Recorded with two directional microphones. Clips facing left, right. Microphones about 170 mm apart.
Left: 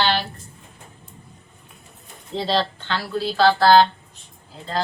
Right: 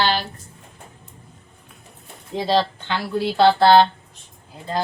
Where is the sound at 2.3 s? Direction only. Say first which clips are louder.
Right 2 dB; 10° right (ahead or behind).